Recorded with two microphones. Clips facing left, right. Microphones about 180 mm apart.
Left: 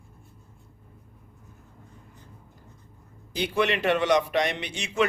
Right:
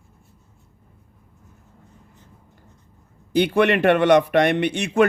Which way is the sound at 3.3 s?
60° right (ahead or behind).